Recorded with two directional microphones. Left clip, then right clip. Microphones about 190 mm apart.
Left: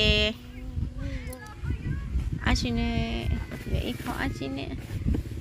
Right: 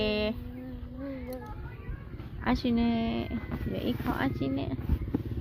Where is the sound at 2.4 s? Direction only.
5° right (ahead or behind).